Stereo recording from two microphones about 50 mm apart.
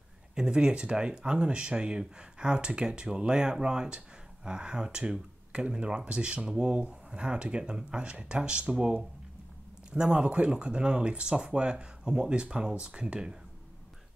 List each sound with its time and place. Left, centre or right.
0.3 s speech: centre